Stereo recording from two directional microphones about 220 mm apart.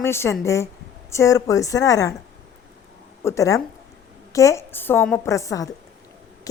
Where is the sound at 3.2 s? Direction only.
15° left (ahead or behind).